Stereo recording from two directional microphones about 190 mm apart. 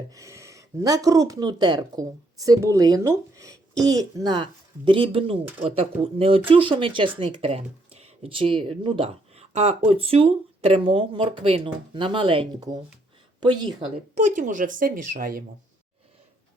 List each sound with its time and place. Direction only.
0.1 s speech: 15° right (ahead or behind)
14.2 s speech: 40° right (ahead or behind)